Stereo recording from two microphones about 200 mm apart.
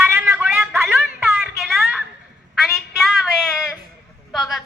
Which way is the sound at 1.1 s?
5° right (ahead or behind).